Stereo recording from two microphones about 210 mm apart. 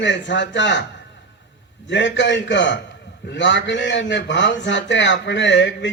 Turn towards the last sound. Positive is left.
turn(degrees=60)  # may be behind; listen again after turning